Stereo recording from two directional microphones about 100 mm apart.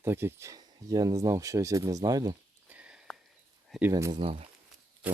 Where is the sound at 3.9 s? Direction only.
40° right (ahead or behind).